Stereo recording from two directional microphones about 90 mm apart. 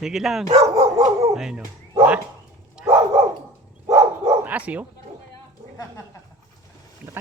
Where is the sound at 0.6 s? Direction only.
40° right (ahead or behind).